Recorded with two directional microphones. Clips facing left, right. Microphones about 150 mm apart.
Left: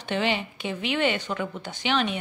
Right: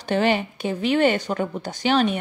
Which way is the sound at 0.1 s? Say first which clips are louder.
Right 6 dB; 45° right (ahead or behind).